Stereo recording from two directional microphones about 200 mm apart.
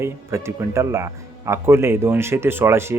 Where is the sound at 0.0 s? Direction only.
15° right (ahead or behind).